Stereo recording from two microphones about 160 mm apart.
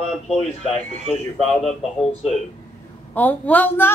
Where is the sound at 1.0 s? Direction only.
35° left (ahead or behind).